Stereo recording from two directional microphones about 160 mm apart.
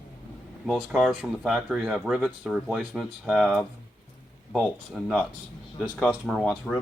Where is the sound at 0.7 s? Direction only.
5° left (ahead or behind).